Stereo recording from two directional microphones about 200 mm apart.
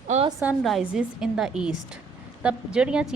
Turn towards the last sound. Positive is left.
turn(degrees=-5)  # may be behind; listen again after turning